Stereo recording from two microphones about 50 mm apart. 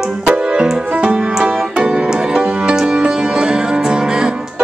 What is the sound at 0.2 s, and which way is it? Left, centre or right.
Music, centre.